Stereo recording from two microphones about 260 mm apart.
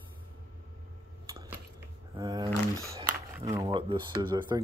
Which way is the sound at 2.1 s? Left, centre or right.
Centre.